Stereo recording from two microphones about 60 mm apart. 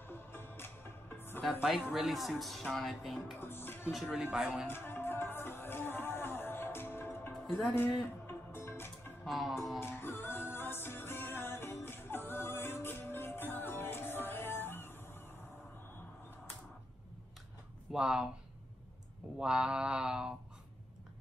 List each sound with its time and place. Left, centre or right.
0.0 s music: left
1.9 s mantra: centre
2.1 s speech: centre
3.3 s speech: left
4.1 s mantra: centre
4.6 s music: left
9.2 s speech: centre
9.8 s music: left
17.9 s mantra: centre
19.3 s mantra: centre